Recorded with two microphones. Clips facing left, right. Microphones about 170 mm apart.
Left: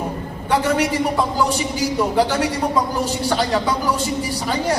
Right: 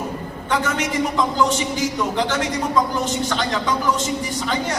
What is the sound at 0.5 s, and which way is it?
Speech, 35° left (ahead or behind).